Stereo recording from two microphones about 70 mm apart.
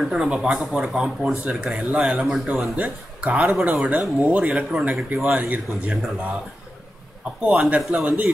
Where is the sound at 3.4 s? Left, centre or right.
Centre.